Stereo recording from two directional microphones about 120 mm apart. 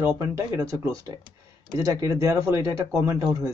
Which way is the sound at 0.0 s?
25° right (ahead or behind).